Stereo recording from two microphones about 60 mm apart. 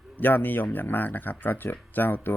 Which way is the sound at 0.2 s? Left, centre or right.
Left.